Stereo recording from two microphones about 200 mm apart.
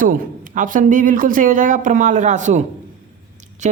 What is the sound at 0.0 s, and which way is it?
A woman's voice, 40° right (ahead or behind).